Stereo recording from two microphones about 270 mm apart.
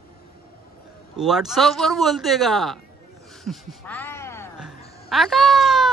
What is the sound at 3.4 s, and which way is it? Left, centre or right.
Music, centre.